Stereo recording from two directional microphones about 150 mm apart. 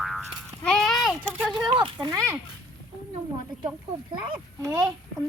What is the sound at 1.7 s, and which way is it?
Speech, 30° right (ahead or behind).